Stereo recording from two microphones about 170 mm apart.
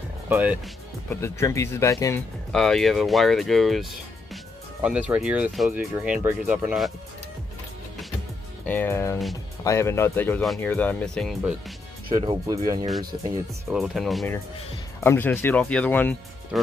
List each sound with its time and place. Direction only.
0.3 s speech: 10° right (ahead or behind)
1.2 s speech: 15° left (ahead or behind)
2.5 s speech: 5° left (ahead or behind)
4.8 s speech: 5° right (ahead or behind)
8.6 s speech: 10° left (ahead or behind)
12.1 s speech: 25° right (ahead or behind)
13.7 s speech: centre (ahead or behind)
15.0 s speech: 10° left (ahead or behind)